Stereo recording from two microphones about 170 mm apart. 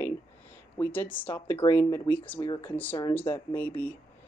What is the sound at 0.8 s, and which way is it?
Speech, 10° left (ahead or behind).